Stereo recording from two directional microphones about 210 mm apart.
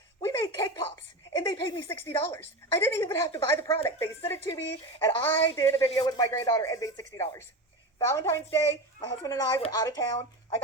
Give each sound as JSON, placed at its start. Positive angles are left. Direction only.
{"t": 0.2, "sound": "a sound", "side_deg": 15}
{"t": 1.3, "sound": "a woman's voice", "side_deg": 15}
{"t": 9.6, "sound": "speech", "side_deg": 25}
{"t": 9.8, "sound": "a woman's voice", "side_deg": 15}